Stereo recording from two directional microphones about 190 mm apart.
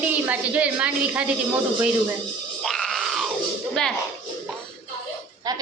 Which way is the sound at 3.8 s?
5° left (ahead or behind).